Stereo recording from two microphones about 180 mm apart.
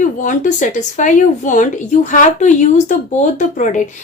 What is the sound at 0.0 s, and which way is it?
Speech, 45° left (ahead or behind).